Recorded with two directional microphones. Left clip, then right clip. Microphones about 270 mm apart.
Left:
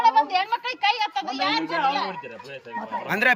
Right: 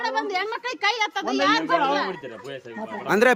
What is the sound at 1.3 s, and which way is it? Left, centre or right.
Speech, centre.